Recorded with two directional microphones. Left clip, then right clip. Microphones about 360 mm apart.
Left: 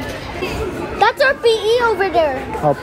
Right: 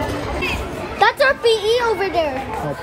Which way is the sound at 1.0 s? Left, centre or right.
Centre.